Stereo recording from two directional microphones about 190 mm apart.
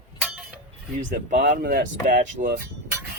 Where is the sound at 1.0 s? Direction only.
45° right (ahead or behind).